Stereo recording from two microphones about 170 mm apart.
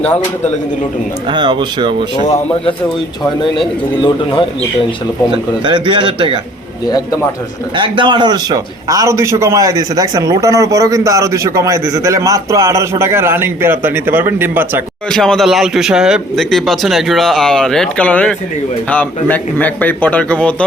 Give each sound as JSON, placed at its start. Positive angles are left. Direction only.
{"t": 1.3, "sound": "speech", "side_deg": -25}
{"t": 4.0, "sound": "speech", "side_deg": 30}
{"t": 5.6, "sound": "speech", "side_deg": -30}
{"t": 6.8, "sound": "speech", "side_deg": 25}
{"t": 7.8, "sound": "a man's voice", "side_deg": -30}
{"t": 15.1, "sound": "a man's voice", "side_deg": 5}